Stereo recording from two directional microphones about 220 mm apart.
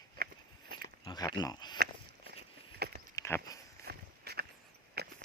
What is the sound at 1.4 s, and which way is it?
Speech, 20° left (ahead or behind).